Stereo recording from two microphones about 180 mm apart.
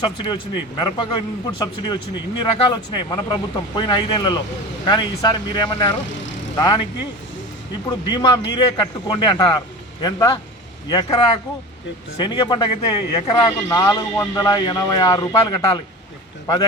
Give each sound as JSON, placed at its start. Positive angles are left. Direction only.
{"t": 0.0, "sound": "a man's voice", "side_deg": 25}
{"t": 7.9, "sound": "a man's voice", "side_deg": 25}
{"t": 12.2, "sound": "a man's voice", "side_deg": 25}